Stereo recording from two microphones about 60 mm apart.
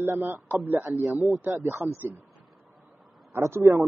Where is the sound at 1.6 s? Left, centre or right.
Right.